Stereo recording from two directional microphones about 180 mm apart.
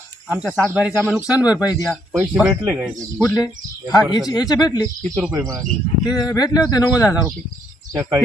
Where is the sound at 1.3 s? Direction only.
20° left (ahead or behind).